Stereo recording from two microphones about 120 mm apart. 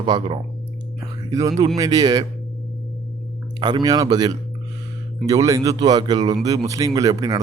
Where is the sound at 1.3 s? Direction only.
30° right (ahead or behind).